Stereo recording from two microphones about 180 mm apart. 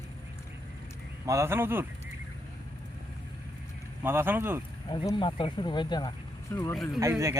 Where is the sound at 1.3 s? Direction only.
15° right (ahead or behind).